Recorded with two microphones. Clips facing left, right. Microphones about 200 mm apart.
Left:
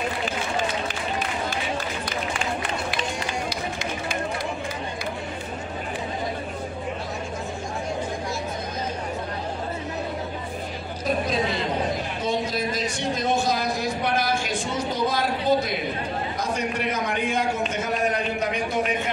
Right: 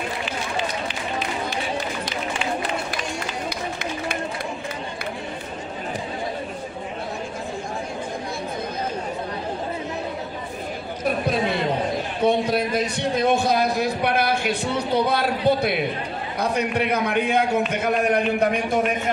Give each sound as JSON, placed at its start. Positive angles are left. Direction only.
{"t": 12.2, "sound": "a man's voice", "side_deg": -60}